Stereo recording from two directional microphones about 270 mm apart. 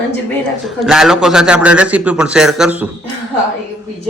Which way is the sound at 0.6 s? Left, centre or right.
Centre.